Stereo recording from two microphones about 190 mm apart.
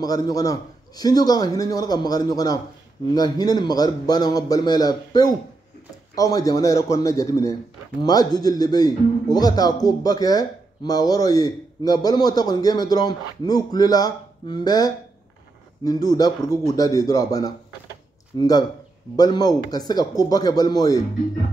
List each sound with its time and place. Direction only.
0.0 s a man's voice: 20° left (ahead or behind)